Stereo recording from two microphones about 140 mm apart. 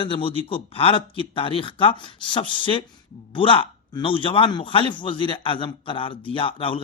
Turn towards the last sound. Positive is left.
turn(degrees=40)  # may be behind; listen again after turning